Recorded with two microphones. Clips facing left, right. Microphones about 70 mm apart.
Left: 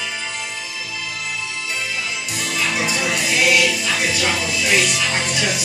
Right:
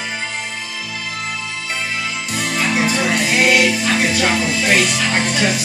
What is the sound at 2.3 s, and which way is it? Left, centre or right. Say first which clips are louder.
Music: right 4 dB; right.